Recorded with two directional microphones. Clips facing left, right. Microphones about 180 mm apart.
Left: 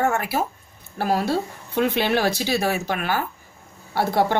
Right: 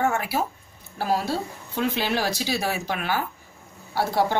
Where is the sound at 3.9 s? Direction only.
60° left (ahead or behind).